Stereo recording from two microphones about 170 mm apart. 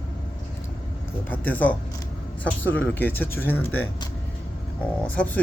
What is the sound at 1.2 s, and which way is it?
Speech, 10° left (ahead or behind).